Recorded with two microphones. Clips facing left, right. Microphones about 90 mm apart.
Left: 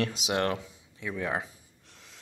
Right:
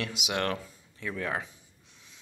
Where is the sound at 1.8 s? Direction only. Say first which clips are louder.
Left 5 dB; 80° left.